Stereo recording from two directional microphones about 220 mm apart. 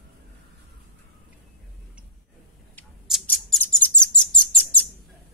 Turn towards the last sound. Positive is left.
turn(degrees=5)  # may be behind; listen again after turning